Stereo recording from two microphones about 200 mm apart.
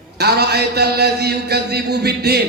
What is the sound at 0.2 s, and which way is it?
A man's voice, 55° right (ahead or behind).